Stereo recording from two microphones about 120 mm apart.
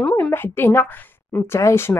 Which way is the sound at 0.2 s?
20° left (ahead or behind).